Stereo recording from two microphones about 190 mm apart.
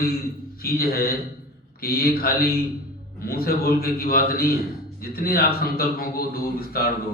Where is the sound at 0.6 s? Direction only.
50° left (ahead or behind).